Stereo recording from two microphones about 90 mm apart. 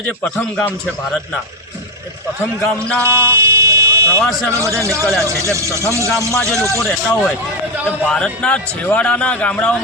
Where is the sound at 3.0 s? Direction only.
30° right (ahead or behind).